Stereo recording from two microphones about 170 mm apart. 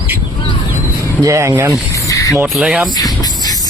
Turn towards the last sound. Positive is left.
turn(degrees=25)  # may be behind; listen again after turning